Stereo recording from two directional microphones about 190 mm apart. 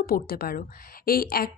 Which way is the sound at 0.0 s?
50° left (ahead or behind).